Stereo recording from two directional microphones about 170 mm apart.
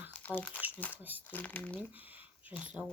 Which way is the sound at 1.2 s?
10° left (ahead or behind).